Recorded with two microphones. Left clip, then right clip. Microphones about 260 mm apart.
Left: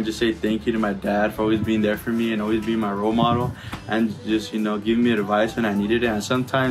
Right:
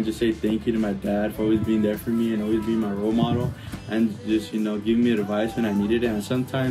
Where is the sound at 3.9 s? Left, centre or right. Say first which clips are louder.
Left 1 dB; centre.